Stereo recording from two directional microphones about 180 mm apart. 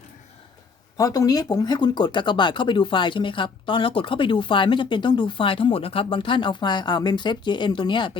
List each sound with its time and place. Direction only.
0.9 s speech: 20° left (ahead or behind)